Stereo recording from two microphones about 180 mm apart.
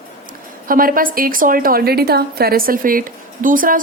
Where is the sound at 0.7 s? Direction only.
50° right (ahead or behind).